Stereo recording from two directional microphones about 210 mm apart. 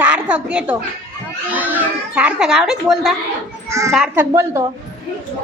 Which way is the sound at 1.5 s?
10° right (ahead or behind).